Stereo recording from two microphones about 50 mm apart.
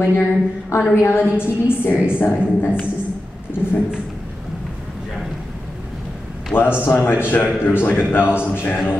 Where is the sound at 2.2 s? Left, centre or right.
Left.